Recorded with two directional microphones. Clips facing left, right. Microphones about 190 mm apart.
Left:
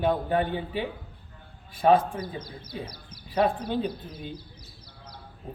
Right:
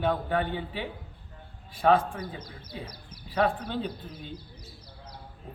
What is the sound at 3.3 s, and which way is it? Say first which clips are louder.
Speech: left 2 dB; 15° left (ahead or behind).